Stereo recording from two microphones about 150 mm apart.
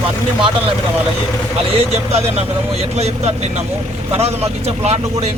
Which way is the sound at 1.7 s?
45° right (ahead or behind).